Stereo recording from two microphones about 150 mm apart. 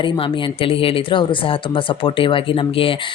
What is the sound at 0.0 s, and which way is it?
Speech, 35° left (ahead or behind).